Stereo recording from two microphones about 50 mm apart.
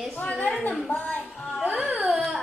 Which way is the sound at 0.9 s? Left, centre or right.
Left.